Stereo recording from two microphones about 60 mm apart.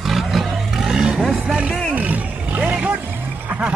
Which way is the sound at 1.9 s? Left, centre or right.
Right.